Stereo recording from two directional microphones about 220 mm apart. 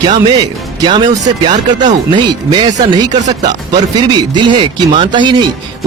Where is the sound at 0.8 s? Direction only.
20° right (ahead or behind).